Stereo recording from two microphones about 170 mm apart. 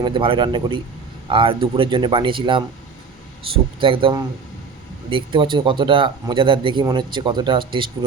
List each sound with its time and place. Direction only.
0.0 s speech: 30° right (ahead or behind)
3.8 s speech: 30° right (ahead or behind)